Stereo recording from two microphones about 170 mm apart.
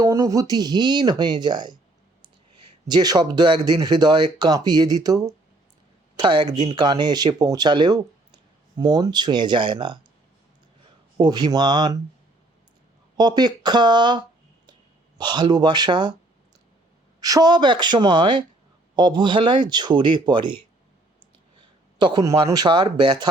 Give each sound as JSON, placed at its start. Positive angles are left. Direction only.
{"t": 0.0, "sound": "speech", "side_deg": -20}
{"t": 2.8, "sound": "speech", "side_deg": -25}
{"t": 11.2, "sound": "speech", "side_deg": -25}
{"t": 13.1, "sound": "speech", "side_deg": -25}
{"t": 15.2, "sound": "speech", "side_deg": -25}
{"t": 17.2, "sound": "speech", "side_deg": -20}
{"t": 21.9, "sound": "speech", "side_deg": -25}